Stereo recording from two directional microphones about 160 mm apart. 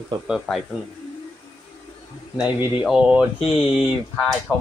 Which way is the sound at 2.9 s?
5° right (ahead or behind).